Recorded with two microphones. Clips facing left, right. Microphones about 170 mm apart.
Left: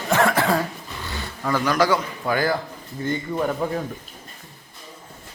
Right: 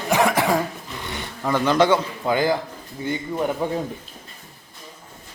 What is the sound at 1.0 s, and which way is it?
Speech, 20° right (ahead or behind).